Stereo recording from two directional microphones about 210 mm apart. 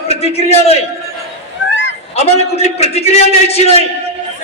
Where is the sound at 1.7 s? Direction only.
60° left (ahead or behind).